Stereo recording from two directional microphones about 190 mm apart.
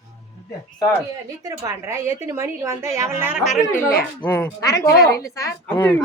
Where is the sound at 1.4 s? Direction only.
15° right (ahead or behind); by 4.5 s 5° left (ahead or behind).